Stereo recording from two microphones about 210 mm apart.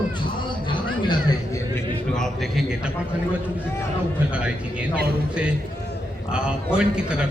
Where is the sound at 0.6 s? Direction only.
20° left (ahead or behind).